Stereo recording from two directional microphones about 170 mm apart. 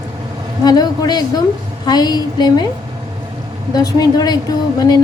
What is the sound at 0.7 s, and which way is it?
A woman's voice, 25° left (ahead or behind).